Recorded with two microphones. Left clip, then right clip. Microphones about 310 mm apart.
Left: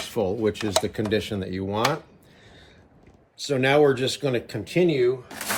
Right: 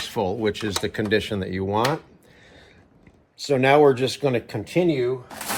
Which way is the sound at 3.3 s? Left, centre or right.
Centre.